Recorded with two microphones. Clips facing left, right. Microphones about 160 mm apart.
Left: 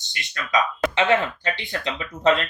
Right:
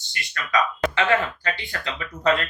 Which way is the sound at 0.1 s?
20° left (ahead or behind).